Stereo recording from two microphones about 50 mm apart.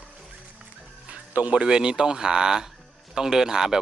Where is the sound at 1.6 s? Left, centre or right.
Centre.